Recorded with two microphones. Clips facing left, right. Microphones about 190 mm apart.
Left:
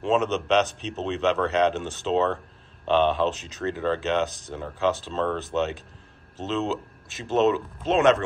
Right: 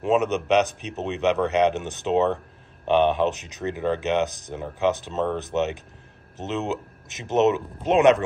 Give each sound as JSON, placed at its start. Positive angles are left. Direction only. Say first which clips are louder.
{"t": 0.0, "sound": "speech", "louder": "right 2 dB", "side_deg": -15}